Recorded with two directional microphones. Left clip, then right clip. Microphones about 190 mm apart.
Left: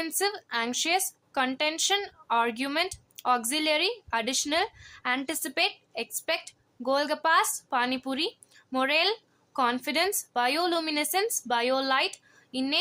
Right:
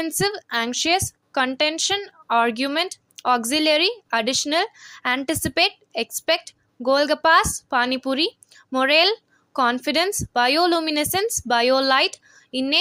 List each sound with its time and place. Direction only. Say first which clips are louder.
0.0 s a woman's voice: right 6 dB; 25° right (ahead or behind)